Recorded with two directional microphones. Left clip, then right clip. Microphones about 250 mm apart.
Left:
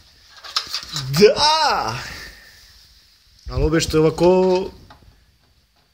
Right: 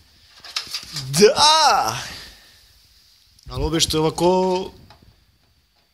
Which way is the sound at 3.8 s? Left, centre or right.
Centre.